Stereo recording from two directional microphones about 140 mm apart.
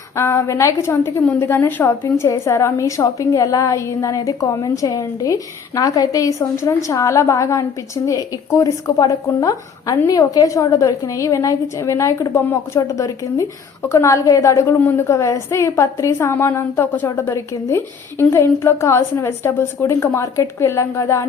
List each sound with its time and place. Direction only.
0.2 s a woman's voice: 20° left (ahead or behind)